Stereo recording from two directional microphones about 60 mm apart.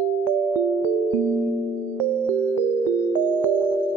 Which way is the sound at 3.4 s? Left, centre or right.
Right.